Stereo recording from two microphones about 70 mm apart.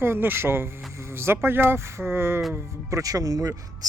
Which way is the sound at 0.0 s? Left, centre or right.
Right.